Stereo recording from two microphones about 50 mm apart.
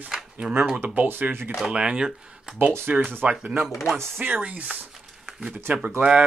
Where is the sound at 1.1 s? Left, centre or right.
Right.